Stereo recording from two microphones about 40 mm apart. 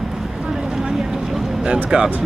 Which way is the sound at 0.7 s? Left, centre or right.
Centre.